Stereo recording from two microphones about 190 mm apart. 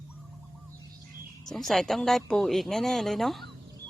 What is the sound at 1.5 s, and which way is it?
Speech, centre (ahead or behind).